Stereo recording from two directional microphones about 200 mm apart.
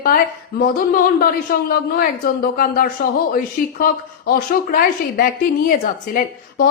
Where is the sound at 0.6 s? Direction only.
45° left (ahead or behind).